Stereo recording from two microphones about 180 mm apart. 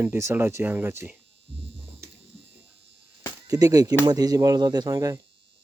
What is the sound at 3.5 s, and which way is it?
Speech, 20° right (ahead or behind).